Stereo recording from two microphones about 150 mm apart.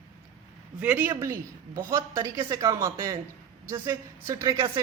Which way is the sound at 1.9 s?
25° right (ahead or behind).